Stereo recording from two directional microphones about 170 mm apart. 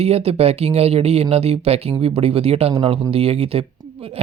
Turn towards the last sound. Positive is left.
turn(degrees=-35)  # may be behind; listen again after turning